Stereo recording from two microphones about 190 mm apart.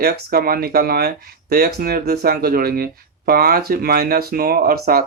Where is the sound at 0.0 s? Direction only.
55° right (ahead or behind).